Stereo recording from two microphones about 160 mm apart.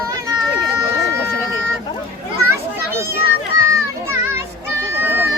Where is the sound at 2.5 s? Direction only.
15° right (ahead or behind).